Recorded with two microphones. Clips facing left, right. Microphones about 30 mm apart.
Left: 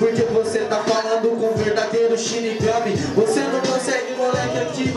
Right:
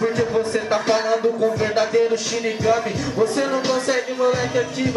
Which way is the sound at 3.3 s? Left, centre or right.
Centre.